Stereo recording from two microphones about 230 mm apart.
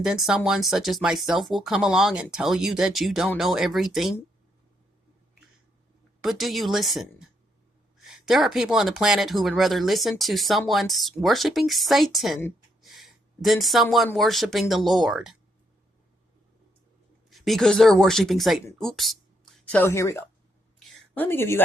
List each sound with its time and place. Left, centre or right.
0.0 s speech: centre
6.2 s speech: centre
17.2 s speech: centre
20.7 s a sound: centre